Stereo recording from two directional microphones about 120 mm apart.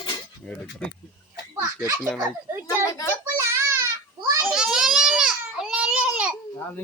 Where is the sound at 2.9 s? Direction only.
30° left (ahead or behind).